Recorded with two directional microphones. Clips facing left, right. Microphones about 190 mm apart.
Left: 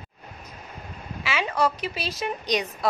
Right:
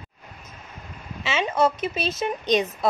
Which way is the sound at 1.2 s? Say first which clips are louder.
Right 3 dB; 25° right (ahead or behind).